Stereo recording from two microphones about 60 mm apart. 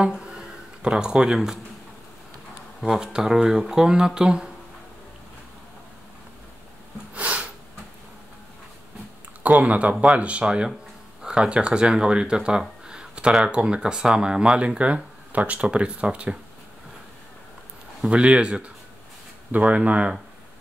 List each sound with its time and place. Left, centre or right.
0.0 s speech: centre
2.8 s speech: centre
7.2 s a sound: right
9.4 s speech: right
18.0 s speech: centre